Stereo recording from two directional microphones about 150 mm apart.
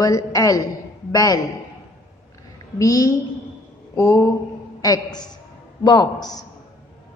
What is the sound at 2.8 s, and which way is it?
A woman's voice, 20° left (ahead or behind).